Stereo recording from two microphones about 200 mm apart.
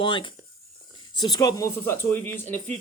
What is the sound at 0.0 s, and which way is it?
Speech, 25° left (ahead or behind).